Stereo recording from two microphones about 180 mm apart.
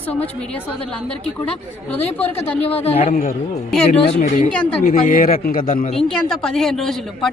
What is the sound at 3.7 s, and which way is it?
Speech, 5° left (ahead or behind).